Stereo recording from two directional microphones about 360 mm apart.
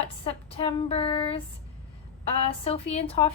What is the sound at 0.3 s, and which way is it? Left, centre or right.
A woman's voice, centre.